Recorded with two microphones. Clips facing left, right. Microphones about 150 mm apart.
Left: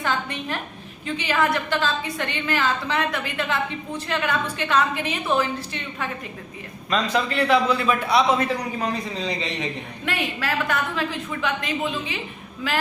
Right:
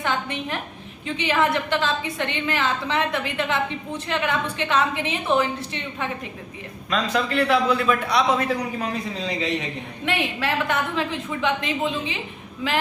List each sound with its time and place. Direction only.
0.0 s a woman's voice: 20° right (ahead or behind)
6.9 s a man's voice: centre (ahead or behind)
10.1 s a woman's voice: 25° right (ahead or behind)